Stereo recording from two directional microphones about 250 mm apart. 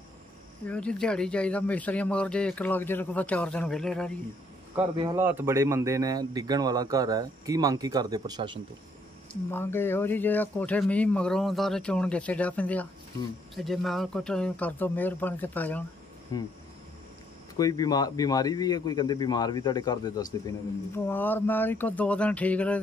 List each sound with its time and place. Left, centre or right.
0.7 s speech: centre
4.7 s a man's voice: centre
9.5 s a man's voice: centre
16.3 s a man's voice: centre
17.6 s a man's voice: centre